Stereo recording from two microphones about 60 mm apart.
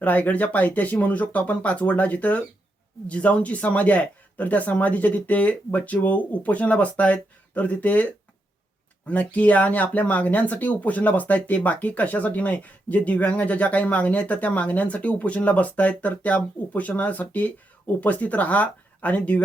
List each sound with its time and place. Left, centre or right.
0.0 s speech: left
9.0 s speech: left